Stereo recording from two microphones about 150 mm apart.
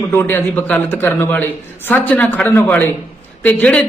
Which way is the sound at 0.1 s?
15° left (ahead or behind).